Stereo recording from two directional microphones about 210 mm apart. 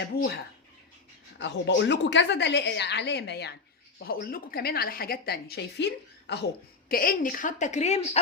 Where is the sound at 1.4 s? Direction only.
55° left (ahead or behind).